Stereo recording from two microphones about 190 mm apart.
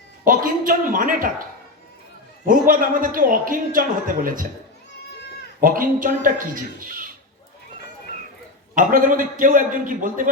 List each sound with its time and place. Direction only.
0.3 s a woman's voice: 45° right (ahead or behind)
2.4 s a man's voice: 45° right (ahead or behind)
5.5 s a man's voice: 45° right (ahead or behind)
8.7 s a man's voice: 45° right (ahead or behind)